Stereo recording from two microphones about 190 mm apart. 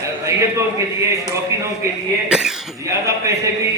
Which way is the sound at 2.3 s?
5° right (ahead or behind).